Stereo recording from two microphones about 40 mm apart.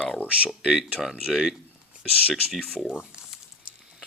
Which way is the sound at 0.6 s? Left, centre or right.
Centre.